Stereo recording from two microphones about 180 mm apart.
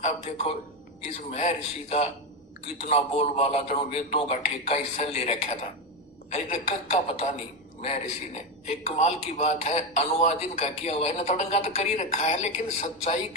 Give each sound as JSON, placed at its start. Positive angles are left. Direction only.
{"t": 0.0, "sound": "a man's voice", "side_deg": 35}
{"t": 8.8, "sound": "a man's voice", "side_deg": 35}